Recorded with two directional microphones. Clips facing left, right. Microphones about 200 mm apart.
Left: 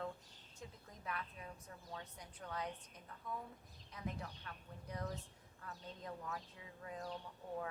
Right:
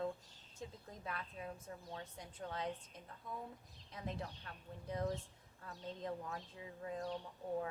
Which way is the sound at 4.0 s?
30° right (ahead or behind).